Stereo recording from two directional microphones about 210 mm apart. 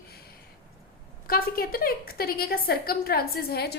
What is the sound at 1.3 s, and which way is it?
A woman's voice, 45° left (ahead or behind).